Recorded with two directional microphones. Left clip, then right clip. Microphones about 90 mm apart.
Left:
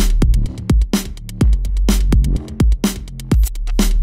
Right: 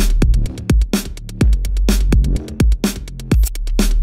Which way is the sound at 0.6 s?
Centre (ahead or behind).